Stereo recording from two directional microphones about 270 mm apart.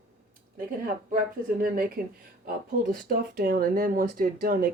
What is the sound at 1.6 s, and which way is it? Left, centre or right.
Speech, right.